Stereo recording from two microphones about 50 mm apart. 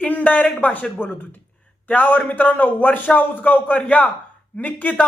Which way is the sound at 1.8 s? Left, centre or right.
Left.